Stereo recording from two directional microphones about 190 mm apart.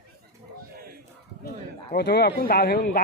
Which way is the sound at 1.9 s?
60° left (ahead or behind).